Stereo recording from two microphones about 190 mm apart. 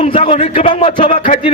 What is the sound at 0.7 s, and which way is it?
Speech, 30° left (ahead or behind).